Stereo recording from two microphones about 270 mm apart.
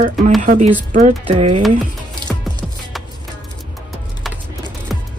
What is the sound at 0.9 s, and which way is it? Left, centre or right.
Speech, right.